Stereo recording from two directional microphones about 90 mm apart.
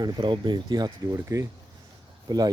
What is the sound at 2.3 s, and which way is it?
Speech, 45° right (ahead or behind).